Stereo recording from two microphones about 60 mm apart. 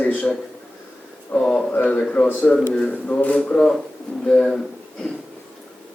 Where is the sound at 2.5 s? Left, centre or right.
Centre.